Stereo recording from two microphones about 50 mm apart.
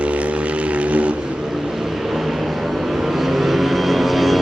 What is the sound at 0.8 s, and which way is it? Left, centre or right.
Vehicle, right.